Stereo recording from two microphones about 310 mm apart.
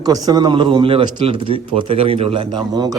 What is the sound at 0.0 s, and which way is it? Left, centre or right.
Speech, centre.